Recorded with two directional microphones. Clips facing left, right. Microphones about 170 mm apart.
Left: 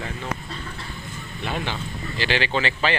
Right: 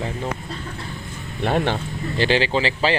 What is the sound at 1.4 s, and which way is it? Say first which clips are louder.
Speech: right 8 dB; 55° right (ahead or behind).